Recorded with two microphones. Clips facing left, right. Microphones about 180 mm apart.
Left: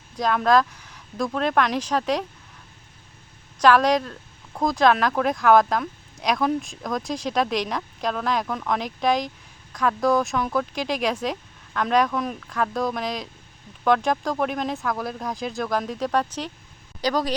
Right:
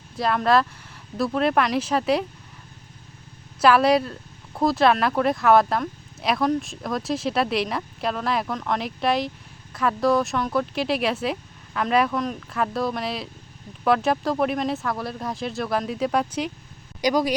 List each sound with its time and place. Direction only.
0.2 s speech: 5° right (ahead or behind)
3.6 s a woman's voice: 5° right (ahead or behind)